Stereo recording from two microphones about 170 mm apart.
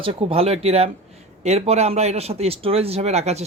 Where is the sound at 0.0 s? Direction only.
30° right (ahead or behind).